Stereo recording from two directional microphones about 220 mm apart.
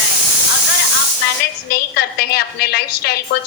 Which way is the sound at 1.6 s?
45° left (ahead or behind).